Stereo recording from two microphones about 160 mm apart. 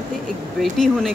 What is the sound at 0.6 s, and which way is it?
Speech, centre (ahead or behind).